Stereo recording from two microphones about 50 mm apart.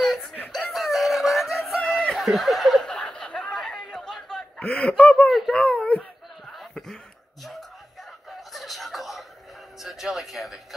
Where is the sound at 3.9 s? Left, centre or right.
Centre.